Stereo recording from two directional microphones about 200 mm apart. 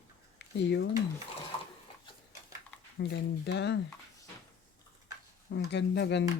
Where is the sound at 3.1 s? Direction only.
55° left (ahead or behind).